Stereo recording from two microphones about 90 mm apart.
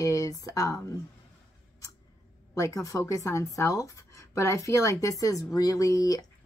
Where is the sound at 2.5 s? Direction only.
35° left (ahead or behind).